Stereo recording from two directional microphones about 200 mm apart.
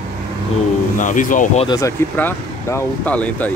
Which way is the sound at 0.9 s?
40° left (ahead or behind).